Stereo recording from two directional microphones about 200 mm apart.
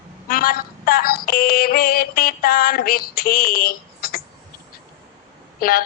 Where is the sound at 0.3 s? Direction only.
45° left (ahead or behind).